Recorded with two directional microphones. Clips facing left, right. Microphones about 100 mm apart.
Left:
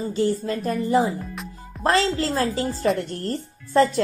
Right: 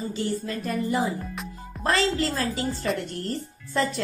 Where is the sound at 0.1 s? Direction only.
30° left (ahead or behind).